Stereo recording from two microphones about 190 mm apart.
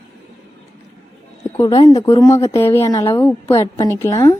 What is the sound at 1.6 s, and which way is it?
A woman's voice, 20° left (ahead or behind).